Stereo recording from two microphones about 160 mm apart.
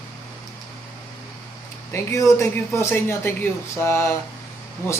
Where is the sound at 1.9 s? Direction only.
20° left (ahead or behind).